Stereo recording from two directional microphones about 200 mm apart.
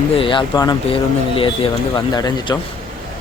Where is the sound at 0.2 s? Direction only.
25° left (ahead or behind).